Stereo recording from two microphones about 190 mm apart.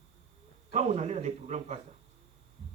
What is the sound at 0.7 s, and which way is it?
Speech, 35° right (ahead or behind).